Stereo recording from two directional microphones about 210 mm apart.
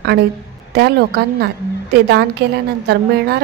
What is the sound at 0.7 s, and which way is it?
A woman's voice, 50° right (ahead or behind).